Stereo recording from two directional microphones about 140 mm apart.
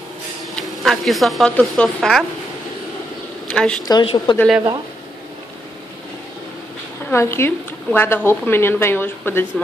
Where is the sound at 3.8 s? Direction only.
30° left (ahead or behind).